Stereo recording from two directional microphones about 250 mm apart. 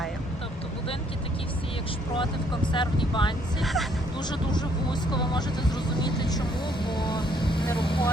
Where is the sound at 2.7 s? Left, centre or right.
Centre.